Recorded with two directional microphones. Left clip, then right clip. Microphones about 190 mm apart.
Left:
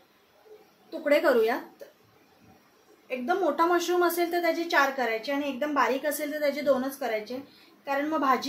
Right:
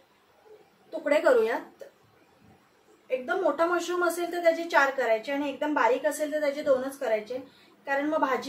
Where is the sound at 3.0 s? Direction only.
25° left (ahead or behind).